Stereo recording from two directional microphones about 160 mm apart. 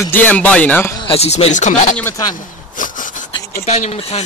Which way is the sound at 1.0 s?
40° left (ahead or behind).